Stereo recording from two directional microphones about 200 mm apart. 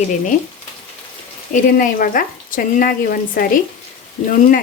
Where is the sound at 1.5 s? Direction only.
40° left (ahead or behind).